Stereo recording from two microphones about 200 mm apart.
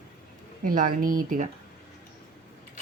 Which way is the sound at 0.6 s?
45° right (ahead or behind).